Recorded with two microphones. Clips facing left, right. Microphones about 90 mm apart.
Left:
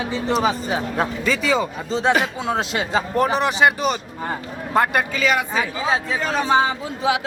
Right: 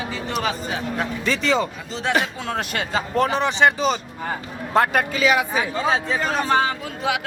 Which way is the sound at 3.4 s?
5° left (ahead or behind).